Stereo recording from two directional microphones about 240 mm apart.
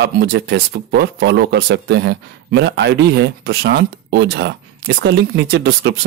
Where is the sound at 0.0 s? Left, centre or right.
Right.